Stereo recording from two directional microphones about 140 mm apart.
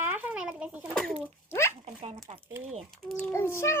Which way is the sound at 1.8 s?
50° right (ahead or behind).